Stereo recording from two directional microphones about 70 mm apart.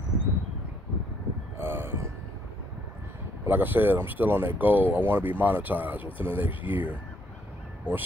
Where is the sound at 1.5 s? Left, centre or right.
Right.